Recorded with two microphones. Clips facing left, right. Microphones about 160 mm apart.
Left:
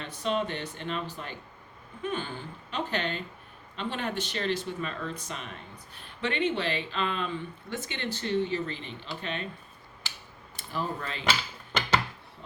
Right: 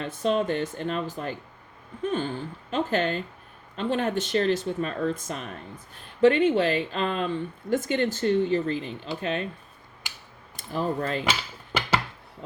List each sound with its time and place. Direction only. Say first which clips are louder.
0.0 s speech: right 5 dB; 40° right (ahead or behind)
10.6 s speech: right 6 dB; 40° right (ahead or behind)
11.3 s a sound: right 1 dB; 10° right (ahead or behind)